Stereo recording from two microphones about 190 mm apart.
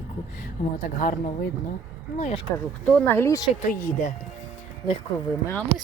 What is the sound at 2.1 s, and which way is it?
Speech, 35° left (ahead or behind).